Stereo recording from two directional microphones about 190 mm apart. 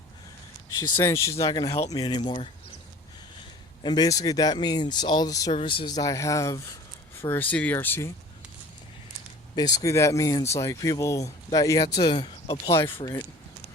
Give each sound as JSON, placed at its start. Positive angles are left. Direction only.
{"t": 0.8, "sound": "speech", "side_deg": 15}
{"t": 1.6, "sound": "speech", "side_deg": 35}
{"t": 1.9, "sound": "speech", "side_deg": 20}
{"t": 3.8, "sound": "speech", "side_deg": 20}
{"t": 9.6, "sound": "speech", "side_deg": 20}